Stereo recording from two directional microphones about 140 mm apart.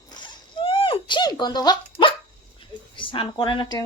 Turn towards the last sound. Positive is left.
turn(degrees=35)  # may be behind; listen again after turning